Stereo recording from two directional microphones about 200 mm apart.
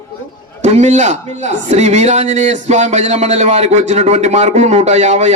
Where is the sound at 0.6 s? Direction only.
35° right (ahead or behind).